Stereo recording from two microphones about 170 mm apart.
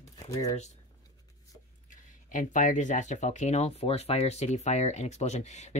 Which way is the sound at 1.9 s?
50° left (ahead or behind).